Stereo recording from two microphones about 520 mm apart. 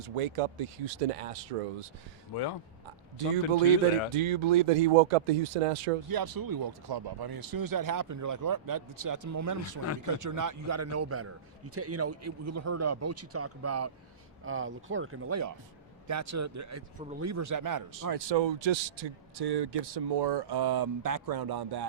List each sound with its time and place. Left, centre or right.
0.2 s speech: right
2.3 s speech: left
4.1 s speech: right
6.1 s a man's voice: right